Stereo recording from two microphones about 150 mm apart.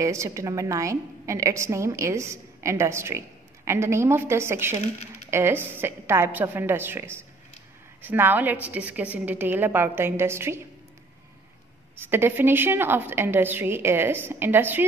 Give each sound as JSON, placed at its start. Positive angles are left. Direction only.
{"t": 0.0, "sound": "a woman's voice", "side_deg": -20}
{"t": 12.0, "sound": "a woman's voice", "side_deg": -15}